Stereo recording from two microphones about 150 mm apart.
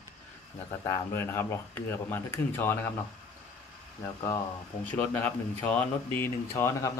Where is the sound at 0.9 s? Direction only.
15° left (ahead or behind).